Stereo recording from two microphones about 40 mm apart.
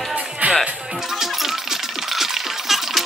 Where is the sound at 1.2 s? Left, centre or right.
Centre.